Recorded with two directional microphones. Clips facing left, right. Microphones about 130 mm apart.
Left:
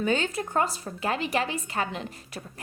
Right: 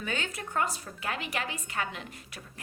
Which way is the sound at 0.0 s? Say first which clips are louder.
Left 9 dB; 30° left (ahead or behind).